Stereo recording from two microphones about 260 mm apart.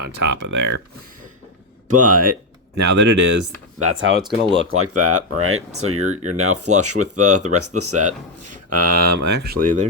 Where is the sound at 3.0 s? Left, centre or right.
Right.